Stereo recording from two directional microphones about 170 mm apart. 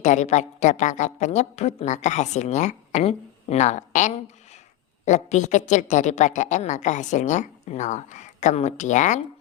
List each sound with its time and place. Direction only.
0.0 s a woman's voice: 45° left (ahead or behind)